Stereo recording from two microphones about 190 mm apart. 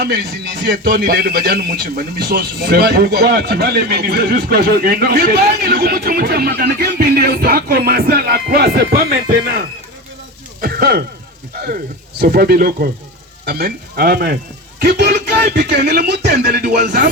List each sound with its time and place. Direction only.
0.0 s a man's voice: 55° right (ahead or behind)
10.6 s a sound: 50° right (ahead or behind)
12.2 s a man's voice: 55° right (ahead or behind)
16.5 s speech: 45° right (ahead or behind)